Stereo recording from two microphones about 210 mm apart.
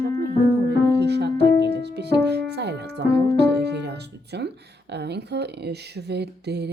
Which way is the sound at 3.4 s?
50° right (ahead or behind).